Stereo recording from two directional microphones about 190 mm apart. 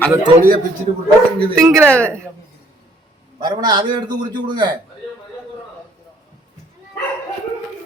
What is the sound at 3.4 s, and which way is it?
A man's voice, 20° right (ahead or behind).